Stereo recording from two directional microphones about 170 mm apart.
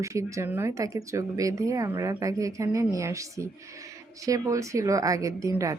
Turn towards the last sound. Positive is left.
turn(degrees=-20)  # may be behind; listen again after turning